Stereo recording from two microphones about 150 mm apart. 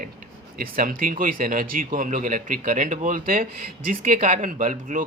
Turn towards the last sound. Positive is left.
turn(degrees=-60)  # may be behind; listen again after turning